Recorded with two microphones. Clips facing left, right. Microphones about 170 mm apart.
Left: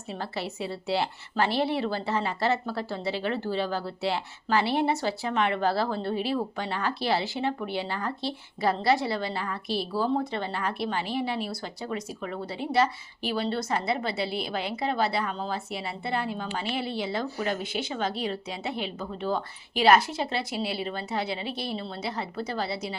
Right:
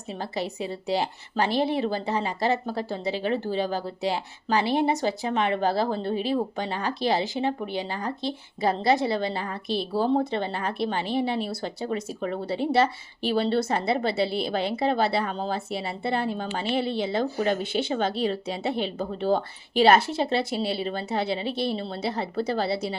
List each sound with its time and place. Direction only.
0.1 s a woman's voice: 15° right (ahead or behind)